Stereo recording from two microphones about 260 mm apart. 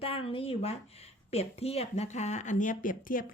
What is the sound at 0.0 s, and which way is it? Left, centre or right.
Speech, left.